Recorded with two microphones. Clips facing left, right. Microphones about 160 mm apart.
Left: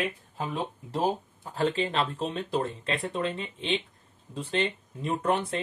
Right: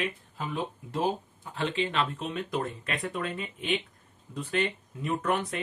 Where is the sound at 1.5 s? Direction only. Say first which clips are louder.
Left 2 dB; 40° left (ahead or behind).